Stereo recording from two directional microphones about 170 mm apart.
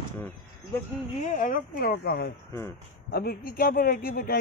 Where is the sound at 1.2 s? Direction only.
45° left (ahead or behind).